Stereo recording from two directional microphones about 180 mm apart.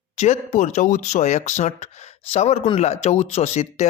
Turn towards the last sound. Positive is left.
turn(degrees=40)  # may be behind; listen again after turning